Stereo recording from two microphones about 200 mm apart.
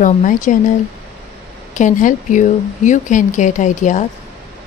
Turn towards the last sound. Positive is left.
turn(degrees=35)  # may be behind; listen again after turning